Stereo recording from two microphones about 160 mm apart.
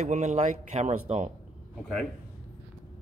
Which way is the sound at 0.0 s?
45° right (ahead or behind).